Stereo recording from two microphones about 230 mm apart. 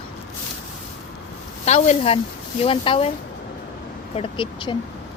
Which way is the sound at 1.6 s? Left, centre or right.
Left.